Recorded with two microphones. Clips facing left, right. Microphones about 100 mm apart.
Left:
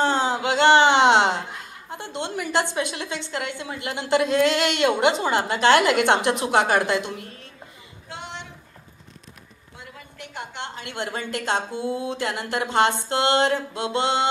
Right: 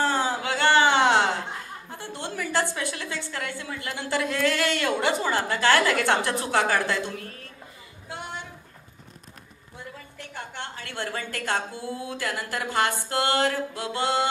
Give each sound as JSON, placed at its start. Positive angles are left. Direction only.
{"t": 0.0, "sound": "speech", "side_deg": 20}
{"t": 10.1, "sound": "a woman's voice", "side_deg": 15}